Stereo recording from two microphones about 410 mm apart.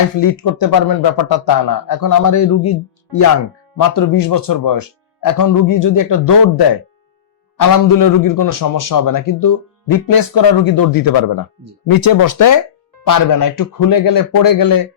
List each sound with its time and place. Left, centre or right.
0.2 s a man's voice: left
3.8 s a man's voice: left
7.6 s a man's voice: left